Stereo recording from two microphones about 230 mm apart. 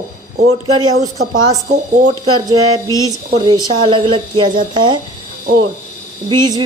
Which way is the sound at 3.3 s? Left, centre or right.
Centre.